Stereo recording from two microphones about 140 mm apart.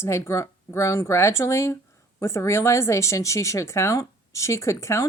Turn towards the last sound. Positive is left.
turn(degrees=20)  # may be behind; listen again after turning